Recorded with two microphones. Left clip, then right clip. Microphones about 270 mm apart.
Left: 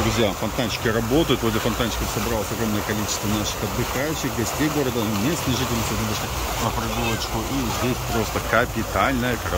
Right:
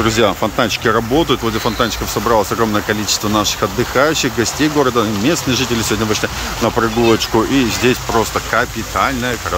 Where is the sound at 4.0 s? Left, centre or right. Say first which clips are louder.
Right 16 dB; centre.